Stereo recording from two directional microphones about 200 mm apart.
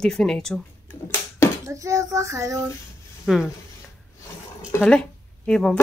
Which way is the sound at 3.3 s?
5° right (ahead or behind).